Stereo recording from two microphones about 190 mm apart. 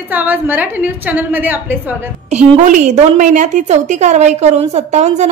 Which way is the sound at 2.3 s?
40° right (ahead or behind).